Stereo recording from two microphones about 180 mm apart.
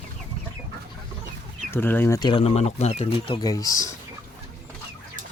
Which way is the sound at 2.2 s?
30° left (ahead or behind).